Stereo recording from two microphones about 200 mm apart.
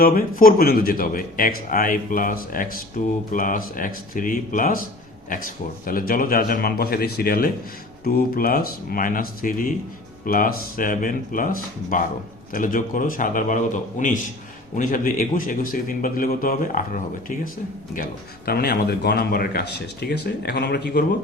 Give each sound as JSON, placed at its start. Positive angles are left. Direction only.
{"t": 0.0, "sound": "a man's voice", "side_deg": 45}